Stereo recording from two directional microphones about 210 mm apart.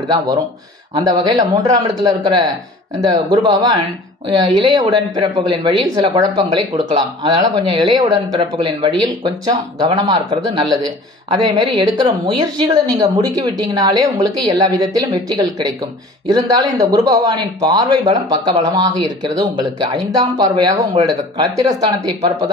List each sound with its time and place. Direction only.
0.9 s speech: 20° right (ahead or behind)